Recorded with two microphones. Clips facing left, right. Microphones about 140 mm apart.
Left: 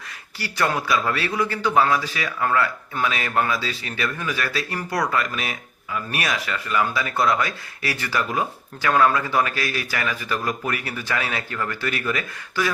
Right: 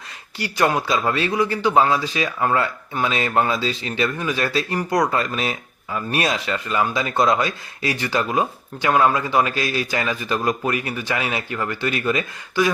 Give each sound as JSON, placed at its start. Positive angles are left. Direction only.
{"t": 0.3, "sound": "speech", "side_deg": -20}